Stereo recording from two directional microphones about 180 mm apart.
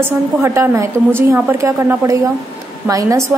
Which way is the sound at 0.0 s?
15° right (ahead or behind).